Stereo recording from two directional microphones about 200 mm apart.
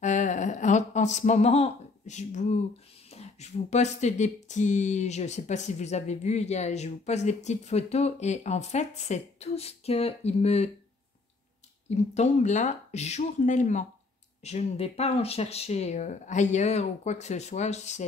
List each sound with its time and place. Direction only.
0.0 s a sound: 40° left (ahead or behind)
3.1 s speech: 35° left (ahead or behind)
11.9 s speech: 35° left (ahead or behind)